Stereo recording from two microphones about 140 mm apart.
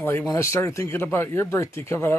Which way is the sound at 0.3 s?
20° left (ahead or behind).